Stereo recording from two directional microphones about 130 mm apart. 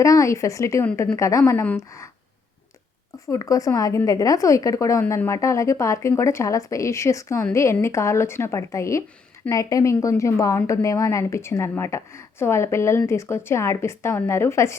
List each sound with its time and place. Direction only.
0.0 s a woman's voice: 25° left (ahead or behind)
3.2 s a woman's voice: 25° left (ahead or behind)